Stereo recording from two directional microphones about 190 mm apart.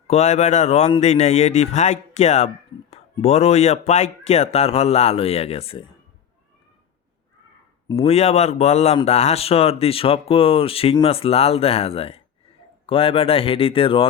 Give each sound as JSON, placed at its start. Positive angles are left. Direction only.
{"t": 0.1, "sound": "speech", "side_deg": 35}
{"t": 7.9, "sound": "speech", "side_deg": 30}